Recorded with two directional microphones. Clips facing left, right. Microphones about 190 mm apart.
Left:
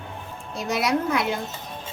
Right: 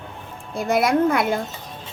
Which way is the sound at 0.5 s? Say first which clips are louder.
Right 5 dB; 55° right (ahead or behind).